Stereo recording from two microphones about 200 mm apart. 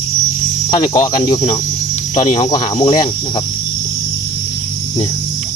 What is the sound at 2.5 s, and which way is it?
Cricket, 25° left (ahead or behind).